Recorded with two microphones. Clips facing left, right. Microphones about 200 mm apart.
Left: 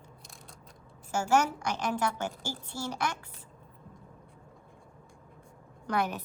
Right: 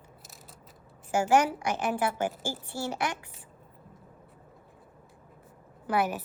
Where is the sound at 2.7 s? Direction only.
40° right (ahead or behind).